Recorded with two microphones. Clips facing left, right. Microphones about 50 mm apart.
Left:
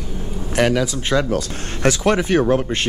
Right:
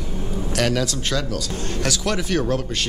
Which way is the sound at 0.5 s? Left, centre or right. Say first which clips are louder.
Left 5 dB; centre.